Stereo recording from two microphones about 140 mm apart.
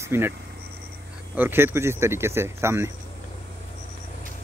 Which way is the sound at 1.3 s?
15° right (ahead or behind).